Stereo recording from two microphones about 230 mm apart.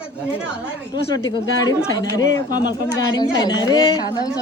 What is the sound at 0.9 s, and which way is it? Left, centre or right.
A woman's voice, centre.